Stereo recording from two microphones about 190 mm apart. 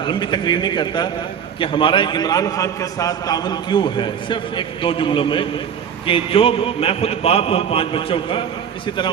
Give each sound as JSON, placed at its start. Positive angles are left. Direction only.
{"t": 0.0, "sound": "a man's voice", "side_deg": 25}